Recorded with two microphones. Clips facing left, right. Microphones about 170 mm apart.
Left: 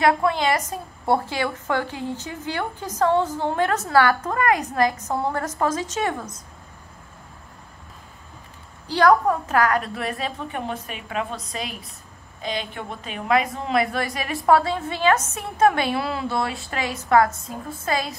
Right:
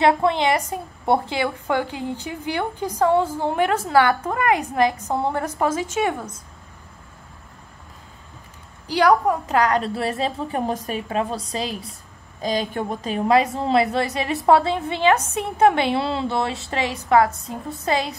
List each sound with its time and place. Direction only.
0.0 s a woman's voice: 25° right (ahead or behind)
8.8 s a woman's voice: 15° right (ahead or behind)